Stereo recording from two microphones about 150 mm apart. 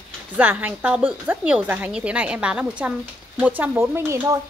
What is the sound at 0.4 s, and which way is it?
Speech, 10° right (ahead or behind).